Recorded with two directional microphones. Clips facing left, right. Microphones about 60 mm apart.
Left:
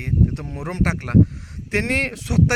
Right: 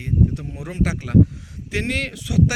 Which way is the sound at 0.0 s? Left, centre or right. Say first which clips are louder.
Even; left.